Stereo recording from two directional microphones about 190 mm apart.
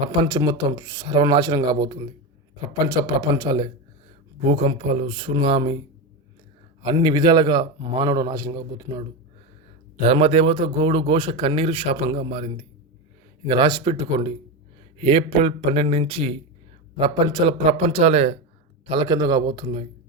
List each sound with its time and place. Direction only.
0.2 s a man's voice: 20° right (ahead or behind)
6.8 s a man's voice: 25° right (ahead or behind)
10.0 s a man's voice: 35° right (ahead or behind)
13.5 s a man's voice: 25° right (ahead or behind)
18.9 s a man's voice: 25° right (ahead or behind)